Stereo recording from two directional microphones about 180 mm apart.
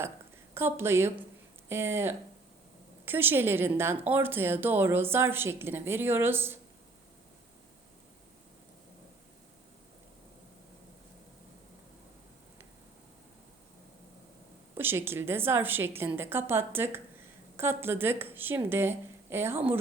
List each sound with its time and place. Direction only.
0.5 s a woman's voice: 15° right (ahead or behind)
14.8 s a woman's voice: 10° right (ahead or behind)